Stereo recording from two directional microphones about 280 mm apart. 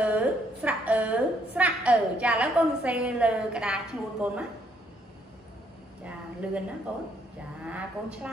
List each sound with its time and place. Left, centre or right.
0.0 s a woman's voice: centre
6.4 s a woman's voice: centre